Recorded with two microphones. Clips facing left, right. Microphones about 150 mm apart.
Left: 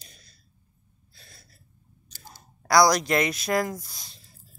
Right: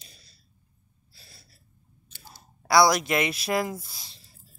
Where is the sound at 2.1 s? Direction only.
45° left (ahead or behind).